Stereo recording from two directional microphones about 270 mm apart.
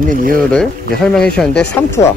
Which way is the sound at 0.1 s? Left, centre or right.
Right.